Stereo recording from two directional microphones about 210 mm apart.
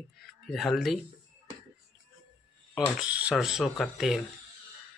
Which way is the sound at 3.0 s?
5° right (ahead or behind).